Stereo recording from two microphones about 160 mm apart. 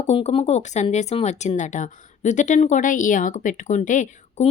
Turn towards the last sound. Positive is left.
turn(degrees=50)  # may be behind; listen again after turning